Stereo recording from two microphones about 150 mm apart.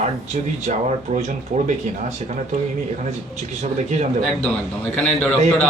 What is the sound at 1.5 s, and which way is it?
Speech, 60° right (ahead or behind).